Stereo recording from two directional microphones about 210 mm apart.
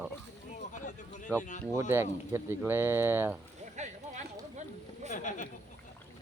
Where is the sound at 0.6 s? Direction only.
35° left (ahead or behind).